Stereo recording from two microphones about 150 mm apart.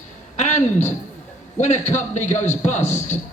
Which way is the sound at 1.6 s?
50° left (ahead or behind).